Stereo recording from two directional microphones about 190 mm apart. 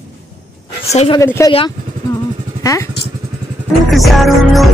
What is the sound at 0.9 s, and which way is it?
Speech, 35° left (ahead or behind).